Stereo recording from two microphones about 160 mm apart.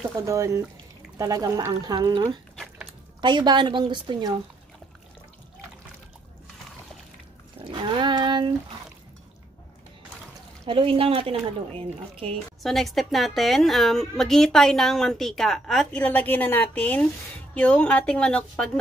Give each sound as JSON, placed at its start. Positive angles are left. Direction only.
{"t": 0.2, "sound": "a woman's voice", "side_deg": -20}
{"t": 7.7, "sound": "a woman's voice", "side_deg": -30}
{"t": 10.6, "sound": "a woman's voice", "side_deg": -35}
{"t": 12.6, "sound": "a woman's voice", "side_deg": 0}